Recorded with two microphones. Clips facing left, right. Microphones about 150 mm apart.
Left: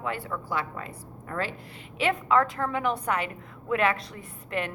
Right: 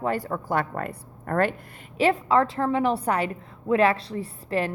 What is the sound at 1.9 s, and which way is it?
A woman's voice, 35° right (ahead or behind).